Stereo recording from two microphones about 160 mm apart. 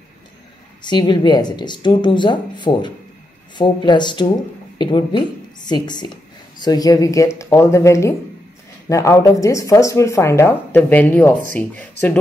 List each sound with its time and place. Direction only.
0.8 s speech: 30° left (ahead or behind); by 11.9 s 10° left (ahead or behind)